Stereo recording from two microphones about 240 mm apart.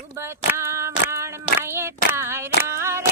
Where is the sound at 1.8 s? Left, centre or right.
Centre.